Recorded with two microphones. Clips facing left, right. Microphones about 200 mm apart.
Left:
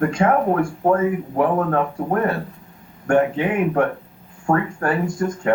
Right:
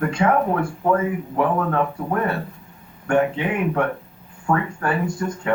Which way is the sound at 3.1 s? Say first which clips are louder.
Left 2 dB; 45° left (ahead or behind).